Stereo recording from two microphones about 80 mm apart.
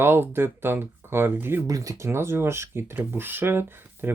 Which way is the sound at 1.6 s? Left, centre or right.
Right.